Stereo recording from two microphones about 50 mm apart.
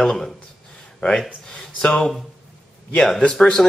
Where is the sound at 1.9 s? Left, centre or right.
Centre.